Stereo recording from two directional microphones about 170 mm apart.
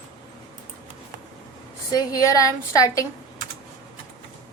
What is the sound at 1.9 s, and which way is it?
A woman's voice, 20° left (ahead or behind).